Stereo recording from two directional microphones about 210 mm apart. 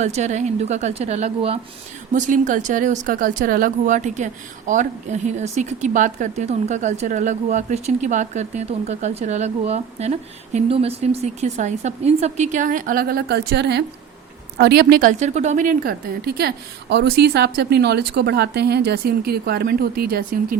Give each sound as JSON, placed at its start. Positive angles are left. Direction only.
{"t": 0.0, "sound": "a woman's voice", "side_deg": -35}